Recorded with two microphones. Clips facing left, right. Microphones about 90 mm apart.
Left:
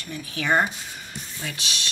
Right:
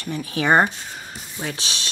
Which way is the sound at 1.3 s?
30° right (ahead or behind).